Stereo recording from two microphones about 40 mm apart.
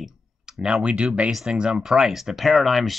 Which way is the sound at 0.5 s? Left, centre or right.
Right.